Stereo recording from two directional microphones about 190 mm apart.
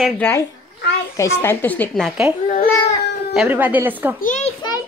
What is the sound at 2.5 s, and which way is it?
Speech, 45° left (ahead or behind).